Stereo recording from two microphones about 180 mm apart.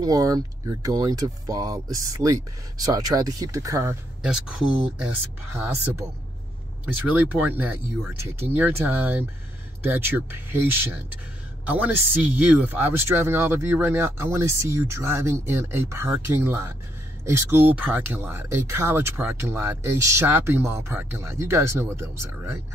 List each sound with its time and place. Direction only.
0.0 s speech: 20° right (ahead or behind)
4.2 s speech: 5° right (ahead or behind)